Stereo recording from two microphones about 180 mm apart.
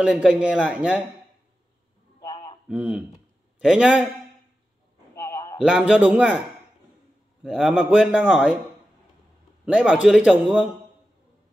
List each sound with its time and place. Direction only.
0.0 s a man's voice: 5° right (ahead or behind)
2.7 s a man's voice: 5° right (ahead or behind)
5.1 s a sound: 20° left (ahead or behind)
5.6 s a man's voice: 5° right (ahead or behind)
7.4 s a man's voice: centre (ahead or behind)
9.7 s a man's voice: 5° right (ahead or behind)